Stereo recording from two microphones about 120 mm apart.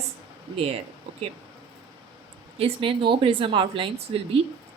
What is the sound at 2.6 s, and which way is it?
Speech, 50° right (ahead or behind).